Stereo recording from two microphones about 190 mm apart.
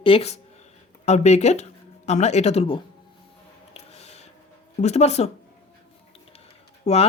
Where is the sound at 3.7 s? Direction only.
35° left (ahead or behind).